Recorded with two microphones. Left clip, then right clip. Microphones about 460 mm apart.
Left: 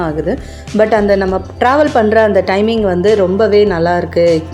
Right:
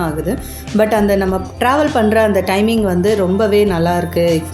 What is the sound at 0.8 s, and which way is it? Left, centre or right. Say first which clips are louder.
A woman's voice: left 3 dB; right.